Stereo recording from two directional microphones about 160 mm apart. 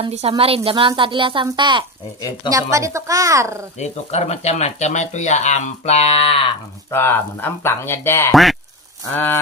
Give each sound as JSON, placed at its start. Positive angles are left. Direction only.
{"t": 0.0, "sound": "a woman's voice", "side_deg": -35}
{"t": 2.7, "sound": "a child's voice", "side_deg": -20}
{"t": 3.8, "sound": "speech", "side_deg": 45}
{"t": 6.9, "sound": "speech", "side_deg": 15}